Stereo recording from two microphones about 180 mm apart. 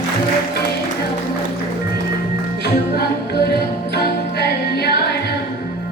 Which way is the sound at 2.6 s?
65° left (ahead or behind).